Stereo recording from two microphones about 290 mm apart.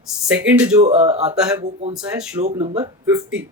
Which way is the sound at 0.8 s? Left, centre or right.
Right.